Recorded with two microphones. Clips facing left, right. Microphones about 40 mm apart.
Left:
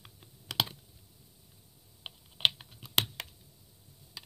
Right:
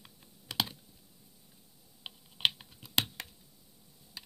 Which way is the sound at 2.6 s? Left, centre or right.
Centre.